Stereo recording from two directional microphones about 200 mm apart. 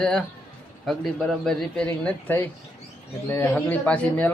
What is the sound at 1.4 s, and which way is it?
Speech, 5° left (ahead or behind).